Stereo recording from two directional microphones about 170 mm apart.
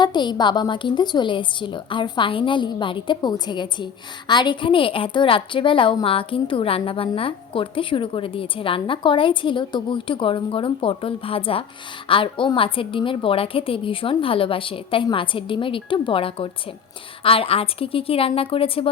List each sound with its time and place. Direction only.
0.0 s a woman's voice: 25° left (ahead or behind)